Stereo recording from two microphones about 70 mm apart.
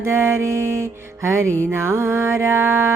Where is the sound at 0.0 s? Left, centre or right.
Right.